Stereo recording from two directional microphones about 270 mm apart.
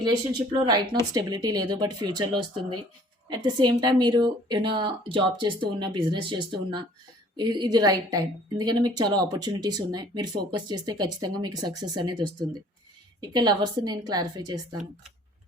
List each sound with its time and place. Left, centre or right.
0.3 s a woman's voice: centre